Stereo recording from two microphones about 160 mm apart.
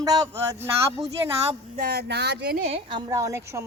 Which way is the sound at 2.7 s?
30° right (ahead or behind).